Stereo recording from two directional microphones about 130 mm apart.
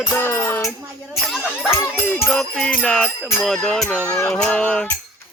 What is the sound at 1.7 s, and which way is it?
Music, 20° left (ahead or behind).